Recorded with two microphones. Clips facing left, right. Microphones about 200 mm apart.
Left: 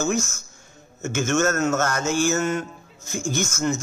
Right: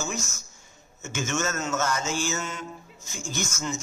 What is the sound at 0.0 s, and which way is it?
Speech, 55° left (ahead or behind).